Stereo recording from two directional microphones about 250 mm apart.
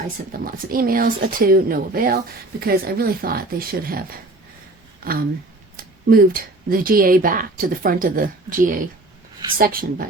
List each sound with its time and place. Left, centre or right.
0.3 s a woman's voice: right
5.0 s a woman's voice: right